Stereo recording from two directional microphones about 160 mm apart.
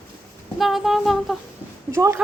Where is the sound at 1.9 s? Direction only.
15° right (ahead or behind).